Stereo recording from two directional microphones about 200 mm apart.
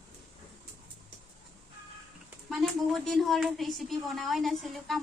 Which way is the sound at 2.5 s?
Centre (ahead or behind).